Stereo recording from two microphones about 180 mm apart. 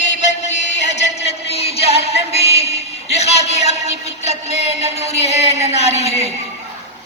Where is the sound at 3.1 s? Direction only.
35° left (ahead or behind).